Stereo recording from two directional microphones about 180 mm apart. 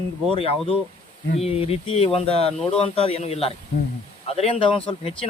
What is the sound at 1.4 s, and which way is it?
Speech, 35° left (ahead or behind).